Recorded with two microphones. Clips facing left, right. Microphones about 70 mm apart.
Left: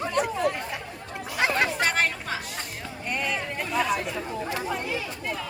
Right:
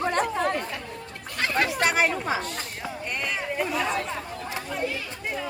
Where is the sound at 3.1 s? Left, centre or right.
Centre.